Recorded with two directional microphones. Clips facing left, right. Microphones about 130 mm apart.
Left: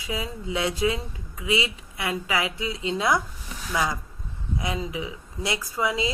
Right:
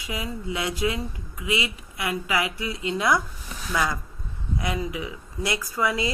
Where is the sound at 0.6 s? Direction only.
25° left (ahead or behind).